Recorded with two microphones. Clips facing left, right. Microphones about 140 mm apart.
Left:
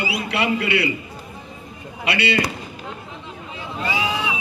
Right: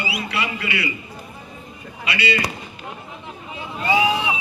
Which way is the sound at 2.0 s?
60° left (ahead or behind).